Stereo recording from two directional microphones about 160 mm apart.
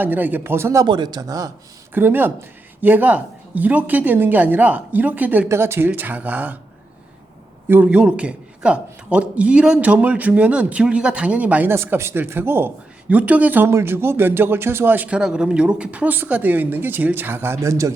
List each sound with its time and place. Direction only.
0.0 s a man's voice: 10° right (ahead or behind)
0.9 s speech: 25° right (ahead or behind)
1.9 s a man's voice: 15° right (ahead or behind)
7.7 s a man's voice: 10° right (ahead or behind)